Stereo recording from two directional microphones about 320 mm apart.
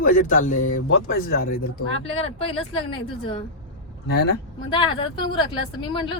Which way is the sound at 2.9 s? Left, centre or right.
Centre.